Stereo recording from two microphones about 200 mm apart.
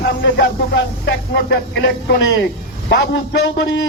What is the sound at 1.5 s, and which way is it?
A man's voice, 55° left (ahead or behind).